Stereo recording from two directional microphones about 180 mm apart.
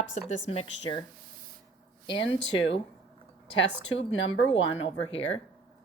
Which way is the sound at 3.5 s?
90° left.